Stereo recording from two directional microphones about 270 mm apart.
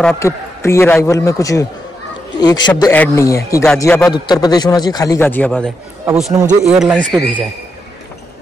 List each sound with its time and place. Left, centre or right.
0.0 s a man's voice: centre